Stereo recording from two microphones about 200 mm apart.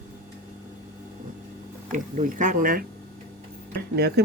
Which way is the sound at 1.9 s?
40° right (ahead or behind).